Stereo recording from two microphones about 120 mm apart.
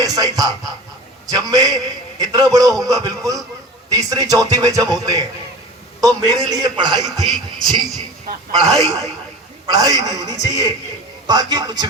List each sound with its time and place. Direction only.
0.0 s a man's voice: 30° right (ahead or behind)
6.9 s a man's voice: centre (ahead or behind)
9.6 s a man's voice: 30° right (ahead or behind)